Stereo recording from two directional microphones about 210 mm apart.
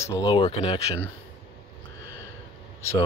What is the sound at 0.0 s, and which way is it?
Speech, 20° left (ahead or behind).